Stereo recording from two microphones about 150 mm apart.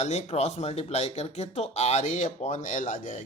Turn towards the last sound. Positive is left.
turn(degrees=55)  # may be behind; listen again after turning